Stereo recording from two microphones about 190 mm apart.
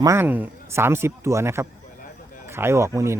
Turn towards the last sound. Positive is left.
turn(degrees=-15)  # may be behind; listen again after turning